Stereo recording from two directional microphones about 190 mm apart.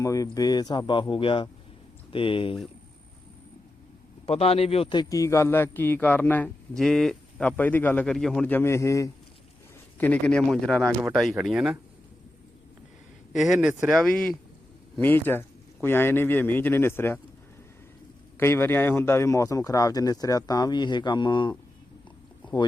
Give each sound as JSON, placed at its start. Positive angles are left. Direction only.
{"t": 0.0, "sound": "speech", "side_deg": 15}
{"t": 4.3, "sound": "a man's voice", "side_deg": 30}
{"t": 13.3, "sound": "a man's voice", "side_deg": 0}
{"t": 18.3, "sound": "a man's voice", "side_deg": 10}